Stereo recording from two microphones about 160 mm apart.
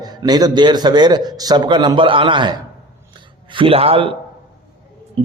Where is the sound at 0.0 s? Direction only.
25° right (ahead or behind).